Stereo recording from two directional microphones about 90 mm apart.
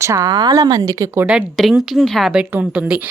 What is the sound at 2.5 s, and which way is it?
Speech, 15° right (ahead or behind).